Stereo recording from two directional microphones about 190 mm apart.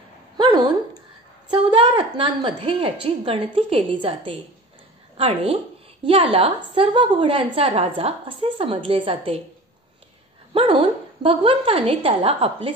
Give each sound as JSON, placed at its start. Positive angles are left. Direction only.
{"t": 0.4, "sound": "a sound", "side_deg": -25}
{"t": 1.5, "sound": "a woman's voice", "side_deg": -25}
{"t": 10.5, "sound": "dog", "side_deg": -30}
{"t": 11.2, "sound": "a woman's voice", "side_deg": -30}